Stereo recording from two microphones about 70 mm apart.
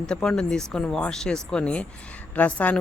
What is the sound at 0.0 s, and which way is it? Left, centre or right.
A woman's voice, centre.